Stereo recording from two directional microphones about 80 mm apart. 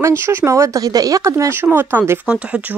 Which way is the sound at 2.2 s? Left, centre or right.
Centre.